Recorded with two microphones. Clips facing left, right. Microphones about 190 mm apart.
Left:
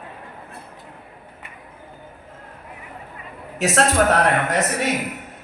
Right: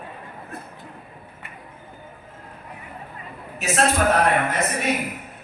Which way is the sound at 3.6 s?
80° left.